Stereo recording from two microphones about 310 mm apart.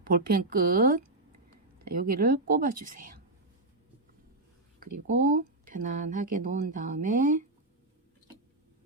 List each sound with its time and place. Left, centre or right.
0.0 s speech: right
5.0 s speech: right